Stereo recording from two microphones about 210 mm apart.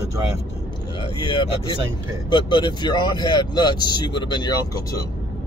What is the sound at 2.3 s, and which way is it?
Speech, 20° left (ahead or behind).